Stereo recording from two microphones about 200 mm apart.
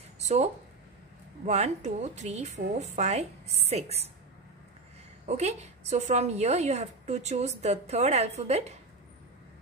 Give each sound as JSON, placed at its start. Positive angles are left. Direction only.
{"t": 0.2, "sound": "a sound", "side_deg": -35}
{"t": 1.4, "sound": "a woman's voice", "side_deg": -35}
{"t": 5.2, "sound": "a woman's voice", "side_deg": -35}